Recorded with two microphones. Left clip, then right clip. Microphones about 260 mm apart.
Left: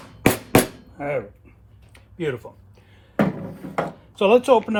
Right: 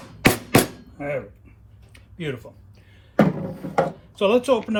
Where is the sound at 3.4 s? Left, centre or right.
Centre.